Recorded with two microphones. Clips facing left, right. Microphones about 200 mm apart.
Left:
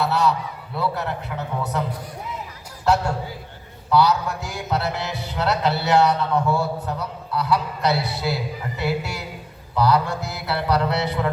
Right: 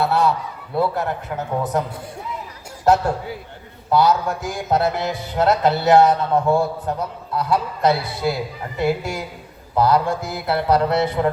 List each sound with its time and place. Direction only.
0.0 s honk: 55° right (ahead or behind)
0.8 s a man's voice: 50° right (ahead or behind)
3.8 s a man's voice: 50° right (ahead or behind)